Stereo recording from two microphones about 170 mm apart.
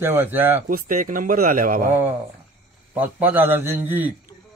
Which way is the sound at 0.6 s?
50° right (ahead or behind).